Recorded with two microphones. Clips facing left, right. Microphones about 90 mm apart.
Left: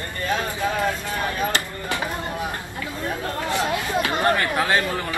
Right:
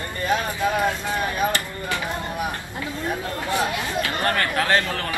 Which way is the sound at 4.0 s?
20° left (ahead or behind).